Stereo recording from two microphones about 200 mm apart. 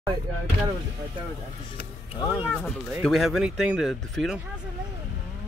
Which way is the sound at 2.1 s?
20° left (ahead or behind).